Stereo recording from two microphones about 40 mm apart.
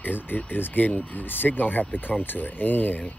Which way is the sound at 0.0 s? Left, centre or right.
Left.